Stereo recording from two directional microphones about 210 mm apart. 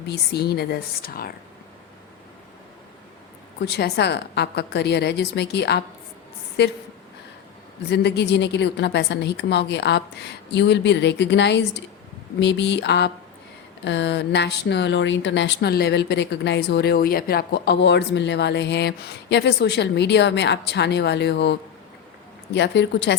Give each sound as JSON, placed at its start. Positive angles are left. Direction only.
{"t": 0.1, "sound": "a woman's voice", "side_deg": 50}
{"t": 3.7, "sound": "a woman's voice", "side_deg": 50}
{"t": 7.9, "sound": "speech", "side_deg": 50}